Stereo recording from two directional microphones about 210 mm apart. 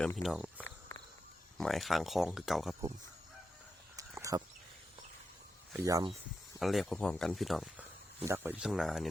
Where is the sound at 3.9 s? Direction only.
15° right (ahead or behind).